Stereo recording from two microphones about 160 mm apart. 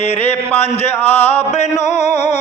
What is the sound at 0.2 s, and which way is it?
Speech, 40° left (ahead or behind).